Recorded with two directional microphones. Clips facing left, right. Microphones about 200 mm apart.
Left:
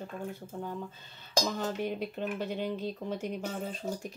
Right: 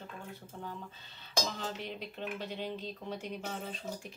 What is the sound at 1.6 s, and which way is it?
Speech, 50° left (ahead or behind).